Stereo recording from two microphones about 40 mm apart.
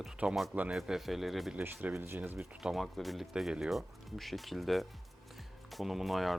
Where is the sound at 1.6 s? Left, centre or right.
Right.